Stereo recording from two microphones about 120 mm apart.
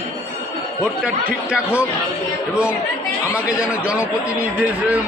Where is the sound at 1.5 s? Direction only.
10° right (ahead or behind).